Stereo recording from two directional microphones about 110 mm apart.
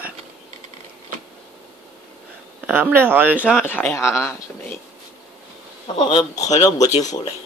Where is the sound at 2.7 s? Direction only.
20° right (ahead or behind).